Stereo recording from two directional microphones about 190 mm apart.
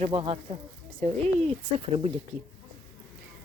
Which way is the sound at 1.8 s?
30° right (ahead or behind).